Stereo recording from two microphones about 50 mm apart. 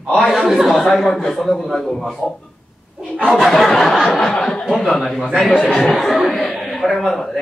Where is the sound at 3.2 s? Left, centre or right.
Centre.